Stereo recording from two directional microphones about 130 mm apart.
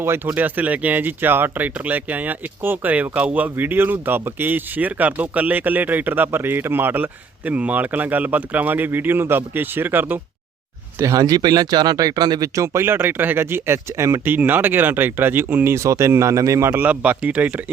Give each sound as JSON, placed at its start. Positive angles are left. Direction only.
{"t": 0.0, "sound": "speech", "side_deg": -20}
{"t": 11.0, "sound": "speech", "side_deg": -25}